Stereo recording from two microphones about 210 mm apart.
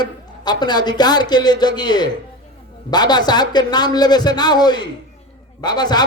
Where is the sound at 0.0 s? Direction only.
20° left (ahead or behind).